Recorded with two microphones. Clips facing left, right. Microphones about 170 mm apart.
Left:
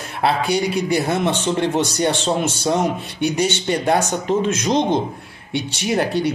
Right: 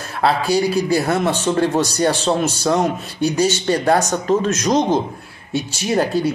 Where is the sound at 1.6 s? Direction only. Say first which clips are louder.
Right 3 dB; 25° left (ahead or behind).